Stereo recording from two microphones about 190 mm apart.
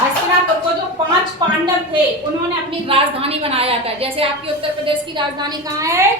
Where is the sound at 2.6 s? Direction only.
30° right (ahead or behind).